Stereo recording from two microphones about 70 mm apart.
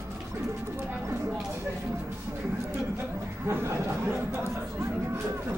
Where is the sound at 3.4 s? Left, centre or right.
Right.